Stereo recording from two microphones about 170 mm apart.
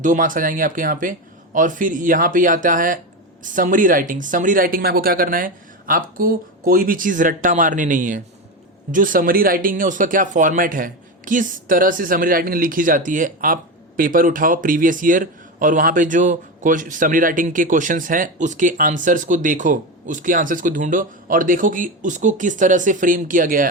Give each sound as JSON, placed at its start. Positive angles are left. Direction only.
{"t": 0.0, "sound": "speech", "side_deg": -50}